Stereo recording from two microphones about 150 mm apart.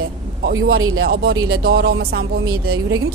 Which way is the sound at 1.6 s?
90° right.